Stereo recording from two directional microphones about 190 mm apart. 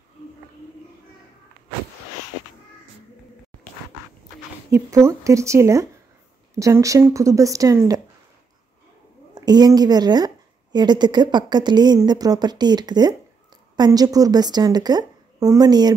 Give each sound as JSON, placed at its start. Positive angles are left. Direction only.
{"t": 4.6, "sound": "speech", "side_deg": -15}
{"t": 9.3, "sound": "a woman's voice", "side_deg": -20}